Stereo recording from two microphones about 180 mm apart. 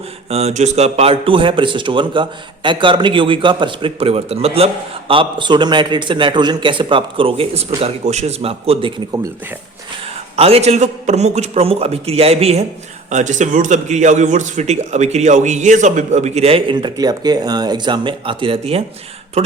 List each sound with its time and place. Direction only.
0.3 s a man's voice: 35° right (ahead or behind)
10.3 s a man's voice: 35° right (ahead or behind)